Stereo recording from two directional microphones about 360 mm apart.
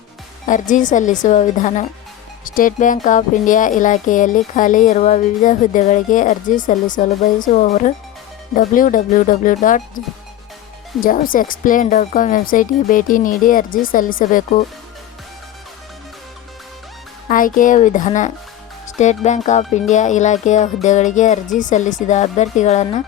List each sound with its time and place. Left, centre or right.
0.4 s speech: left
11.0 s speech: left
17.2 s speech: left